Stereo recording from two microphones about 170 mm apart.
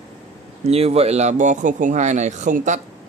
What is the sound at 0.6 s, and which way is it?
Speech, 35° right (ahead or behind).